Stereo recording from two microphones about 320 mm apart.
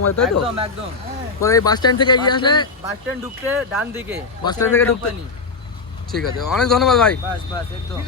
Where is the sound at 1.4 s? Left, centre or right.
Centre.